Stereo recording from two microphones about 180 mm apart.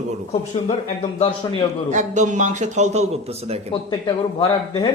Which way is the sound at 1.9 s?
40° right (ahead or behind).